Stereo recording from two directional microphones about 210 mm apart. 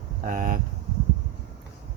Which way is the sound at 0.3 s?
40° right (ahead or behind).